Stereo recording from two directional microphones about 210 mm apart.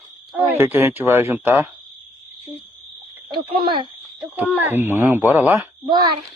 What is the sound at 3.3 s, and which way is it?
Speech, 25° right (ahead or behind).